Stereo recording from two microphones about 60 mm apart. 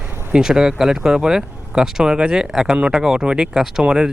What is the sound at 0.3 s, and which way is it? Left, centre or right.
Speech, centre.